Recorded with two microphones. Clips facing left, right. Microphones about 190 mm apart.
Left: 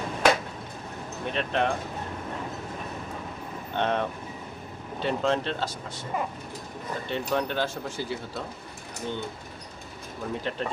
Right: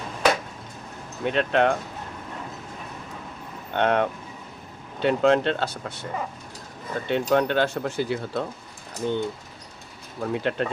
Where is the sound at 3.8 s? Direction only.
60° right (ahead or behind).